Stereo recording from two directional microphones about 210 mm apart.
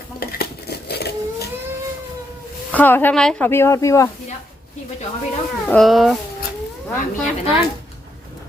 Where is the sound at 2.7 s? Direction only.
10° left (ahead or behind).